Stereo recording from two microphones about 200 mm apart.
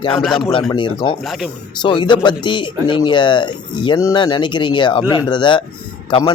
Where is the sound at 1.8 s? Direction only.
25° left (ahead or behind).